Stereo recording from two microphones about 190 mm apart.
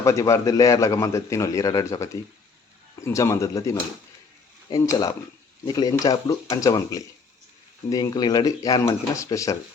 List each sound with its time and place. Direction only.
0.0 s a man's voice: 15° left (ahead or behind)